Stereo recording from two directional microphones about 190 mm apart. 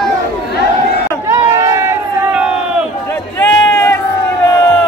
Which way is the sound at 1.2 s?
15° right (ahead or behind).